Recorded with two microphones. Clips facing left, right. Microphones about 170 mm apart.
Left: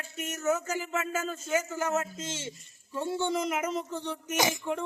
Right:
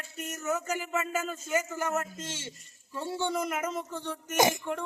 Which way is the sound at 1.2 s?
10° right (ahead or behind).